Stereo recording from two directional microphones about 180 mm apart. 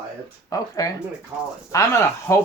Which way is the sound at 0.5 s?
20° left (ahead or behind).